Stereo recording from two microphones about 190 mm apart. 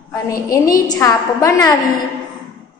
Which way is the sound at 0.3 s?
20° left (ahead or behind).